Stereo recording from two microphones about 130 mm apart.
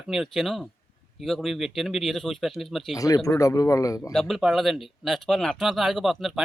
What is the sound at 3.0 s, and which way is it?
Speech, 25° left (ahead or behind).